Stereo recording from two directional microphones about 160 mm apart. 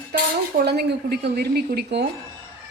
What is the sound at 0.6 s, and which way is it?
A woman's voice, 90° right.